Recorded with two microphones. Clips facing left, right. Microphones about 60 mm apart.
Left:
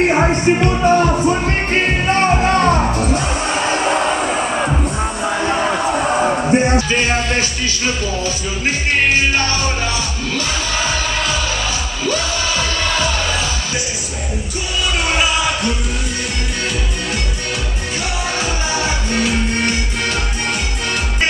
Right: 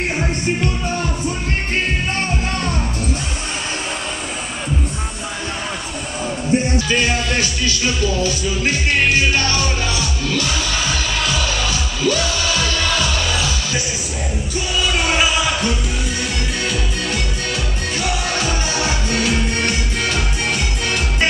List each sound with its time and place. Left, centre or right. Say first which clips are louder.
0.0 s music: left 8 dB; left
1.8 s music: left 7 dB; left
3.8 s vehicle: left 10 dB; left
5.6 s music: left 10 dB; left
6.9 s music: left 1 dB; left
12.0 s music: right 1 dB; left
15.0 s a sound: left 2 dB; centre
18.4 s music: left 1 dB; centre